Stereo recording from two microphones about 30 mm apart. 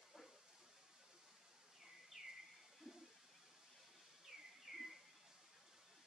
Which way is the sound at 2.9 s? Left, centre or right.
Right.